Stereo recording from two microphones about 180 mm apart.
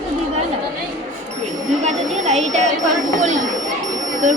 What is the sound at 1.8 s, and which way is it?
Sine wave, 40° right (ahead or behind).